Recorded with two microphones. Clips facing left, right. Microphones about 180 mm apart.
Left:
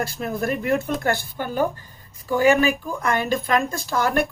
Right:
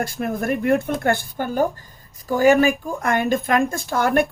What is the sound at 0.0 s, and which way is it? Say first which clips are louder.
Speech: right 1 dB; 50° right (ahead or behind).